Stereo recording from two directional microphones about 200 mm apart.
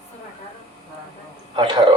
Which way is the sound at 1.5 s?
20° right (ahead or behind).